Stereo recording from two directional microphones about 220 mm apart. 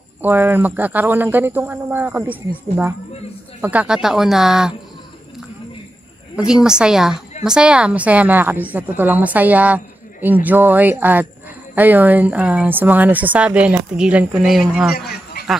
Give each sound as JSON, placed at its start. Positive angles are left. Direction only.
{"t": 0.2, "sound": "a woman's voice", "side_deg": -10}
{"t": 3.6, "sound": "speech", "side_deg": -5}
{"t": 6.3, "sound": "a woman's voice", "side_deg": -5}
{"t": 15.0, "sound": "a sound", "side_deg": 45}